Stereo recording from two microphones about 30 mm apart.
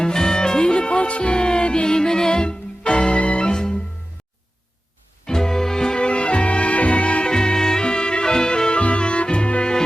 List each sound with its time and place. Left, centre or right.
0.0 s music: left
3.4 s music: left
5.2 s music: centre
6.0 s music: left
7.3 s music: left
7.9 s music: left
8.7 s music: left